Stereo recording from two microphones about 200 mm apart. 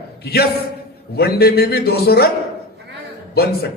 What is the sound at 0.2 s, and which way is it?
A man's voice, 55° left (ahead or behind).